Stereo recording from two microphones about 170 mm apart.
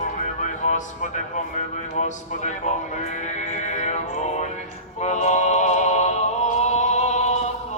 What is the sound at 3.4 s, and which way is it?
Music, 45° left (ahead or behind).